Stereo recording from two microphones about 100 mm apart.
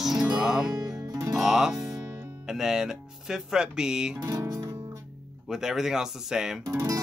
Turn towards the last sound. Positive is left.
turn(degrees=-35)  # may be behind; listen again after turning